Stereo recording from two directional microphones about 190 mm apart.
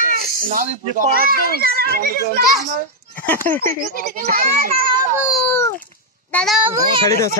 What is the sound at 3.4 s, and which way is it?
Speech, 10° left (ahead or behind).